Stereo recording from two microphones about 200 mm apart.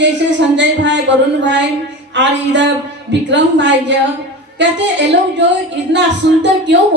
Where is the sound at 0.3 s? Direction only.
60° right (ahead or behind).